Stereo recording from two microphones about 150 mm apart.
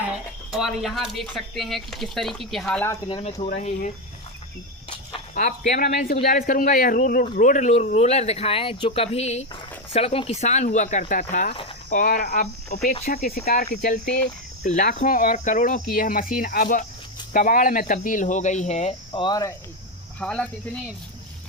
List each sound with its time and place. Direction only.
0.5 s speech: centre (ahead or behind)
3.1 s speech: 35° left (ahead or behind)
3.4 s speech: 50° left (ahead or behind)
5.3 s a man's voice: 70° left (ahead or behind); by 9.5 s 45° left (ahead or behind)
9.5 s speech: 35° left (ahead or behind); by 11.2 s 55° left (ahead or behind)
11.2 s a man's voice: 65° left (ahead or behind); by 12.8 s 90° left
12.8 s speech: 55° left (ahead or behind)
13.1 s speech: 85° left
13.7 s speech: 55° left (ahead or behind)
19.1 s cricket: 30° left (ahead or behind)
20.1 s speech: 10° left (ahead or behind)